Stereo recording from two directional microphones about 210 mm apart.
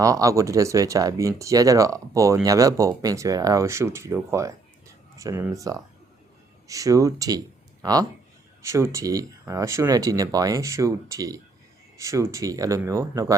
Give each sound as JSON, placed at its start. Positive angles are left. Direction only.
{"t": 0.0, "sound": "speech", "side_deg": -15}